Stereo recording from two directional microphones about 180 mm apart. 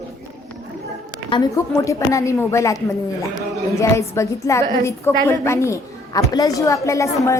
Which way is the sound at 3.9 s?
15° left (ahead or behind).